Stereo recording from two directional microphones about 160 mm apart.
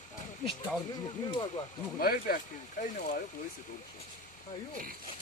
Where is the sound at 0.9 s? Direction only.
30° left (ahead or behind).